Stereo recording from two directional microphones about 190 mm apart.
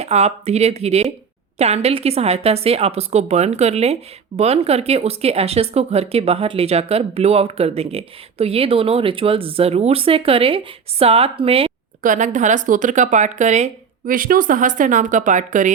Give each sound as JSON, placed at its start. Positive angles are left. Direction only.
{"t": 0.0, "sound": "speech", "side_deg": -35}
{"t": 12.0, "sound": "speech", "side_deg": -40}